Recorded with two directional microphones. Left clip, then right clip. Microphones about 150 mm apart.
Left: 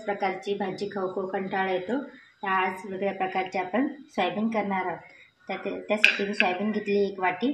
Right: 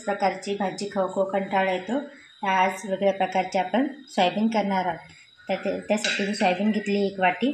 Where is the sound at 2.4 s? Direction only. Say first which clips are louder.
Right 4 dB; 90° right; by 6.0 s 70° right (ahead or behind).